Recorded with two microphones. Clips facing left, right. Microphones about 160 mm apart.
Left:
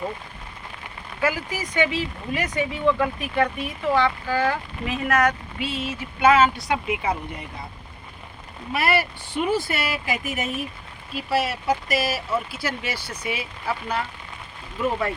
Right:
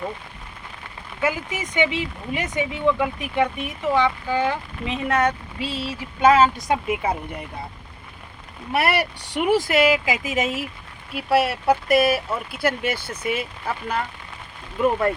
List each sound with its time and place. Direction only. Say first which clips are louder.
1.2 s speech: even; 20° right (ahead or behind); by 7.2 s 45° right (ahead or behind)
8.7 s speech: right 1 dB; 65° right (ahead or behind); by 10.7 s 90° right
11.1 s speech: right 4 dB; 60° right (ahead or behind)